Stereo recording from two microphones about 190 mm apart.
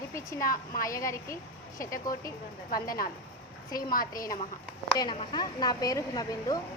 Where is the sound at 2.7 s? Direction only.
20° left (ahead or behind).